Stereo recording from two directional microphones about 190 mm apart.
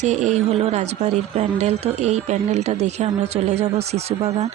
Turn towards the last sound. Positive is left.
turn(degrees=-35)  # may be behind; listen again after turning